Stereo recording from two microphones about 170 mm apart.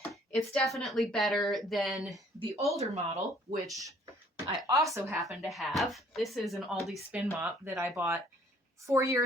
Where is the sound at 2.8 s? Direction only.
40° right (ahead or behind).